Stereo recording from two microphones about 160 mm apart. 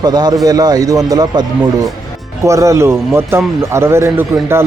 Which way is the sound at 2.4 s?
20° right (ahead or behind).